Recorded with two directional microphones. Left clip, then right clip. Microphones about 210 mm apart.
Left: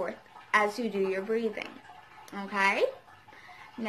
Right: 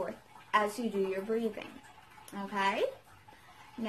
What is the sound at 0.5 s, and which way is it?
A woman's voice, 15° right (ahead or behind).